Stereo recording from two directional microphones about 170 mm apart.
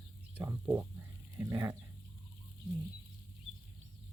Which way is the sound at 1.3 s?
15° right (ahead or behind).